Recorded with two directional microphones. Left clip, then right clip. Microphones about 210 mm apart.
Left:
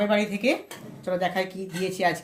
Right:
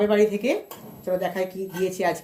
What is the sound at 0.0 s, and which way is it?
Speech, 45° left (ahead or behind).